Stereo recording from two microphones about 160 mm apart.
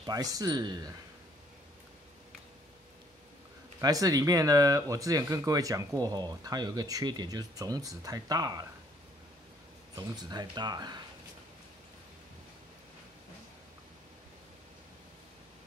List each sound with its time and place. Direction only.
0.0 s speech: 25° right (ahead or behind)
3.8 s speech: 20° right (ahead or behind)
9.9 s speech: 25° right (ahead or behind)